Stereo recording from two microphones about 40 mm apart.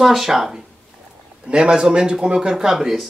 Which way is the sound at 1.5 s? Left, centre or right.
Right.